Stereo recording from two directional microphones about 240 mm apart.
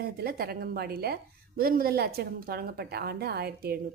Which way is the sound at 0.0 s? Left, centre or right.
Right.